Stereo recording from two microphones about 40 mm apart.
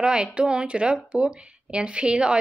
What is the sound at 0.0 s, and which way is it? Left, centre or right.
Speech, right.